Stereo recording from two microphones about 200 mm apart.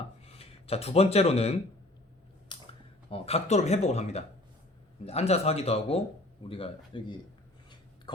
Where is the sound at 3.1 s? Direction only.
30° left (ahead or behind).